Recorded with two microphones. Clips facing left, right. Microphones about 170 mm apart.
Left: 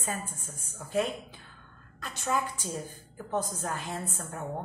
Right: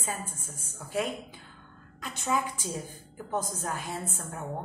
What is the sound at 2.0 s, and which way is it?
A woman's voice, 15° right (ahead or behind).